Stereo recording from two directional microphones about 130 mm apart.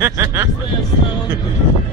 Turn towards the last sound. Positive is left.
turn(degrees=-20)  # may be behind; listen again after turning